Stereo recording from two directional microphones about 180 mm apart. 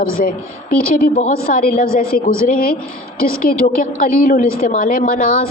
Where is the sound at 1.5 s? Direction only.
55° left (ahead or behind).